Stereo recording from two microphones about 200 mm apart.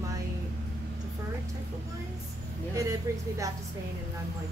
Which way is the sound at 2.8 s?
15° right (ahead or behind).